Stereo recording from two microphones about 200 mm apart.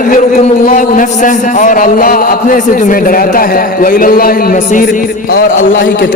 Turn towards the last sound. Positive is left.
turn(degrees=45)  # may be behind; listen again after turning